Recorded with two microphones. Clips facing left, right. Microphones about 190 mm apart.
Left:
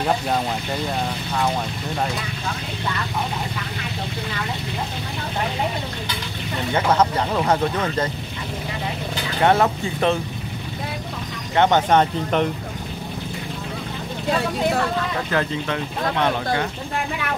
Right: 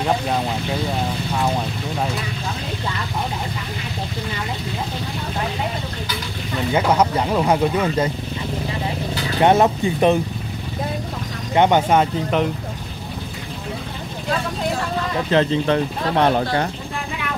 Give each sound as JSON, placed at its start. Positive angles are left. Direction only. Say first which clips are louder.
{"t": 6.7, "sound": "speech", "louder": "right 1 dB", "side_deg": -10}
{"t": 9.4, "sound": "speech", "louder": "right 3 dB", "side_deg": -20}
{"t": 11.5, "sound": "speech", "louder": "right 1 dB", "side_deg": -15}
{"t": 15.3, "sound": "speech", "louder": "right 6 dB", "side_deg": -20}
{"t": 15.6, "sound": "speech", "louder": "right 5 dB", "side_deg": -35}